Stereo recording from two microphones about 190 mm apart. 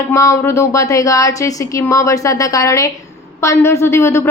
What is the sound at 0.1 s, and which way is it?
A woman's voice, 15° left (ahead or behind).